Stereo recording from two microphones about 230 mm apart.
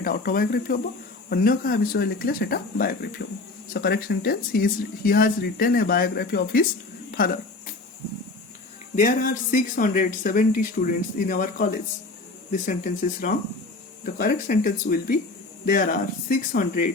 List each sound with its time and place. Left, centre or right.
0.0 s speech: left
9.0 s speech: left